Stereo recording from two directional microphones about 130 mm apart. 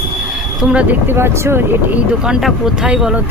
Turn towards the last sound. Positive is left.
turn(degrees=-5)  # may be behind; listen again after turning